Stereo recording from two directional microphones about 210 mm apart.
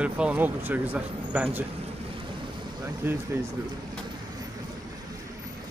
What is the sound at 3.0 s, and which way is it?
Speech, 10° right (ahead or behind).